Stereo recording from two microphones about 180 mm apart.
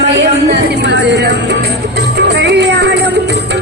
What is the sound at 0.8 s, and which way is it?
Music, 70° right (ahead or behind).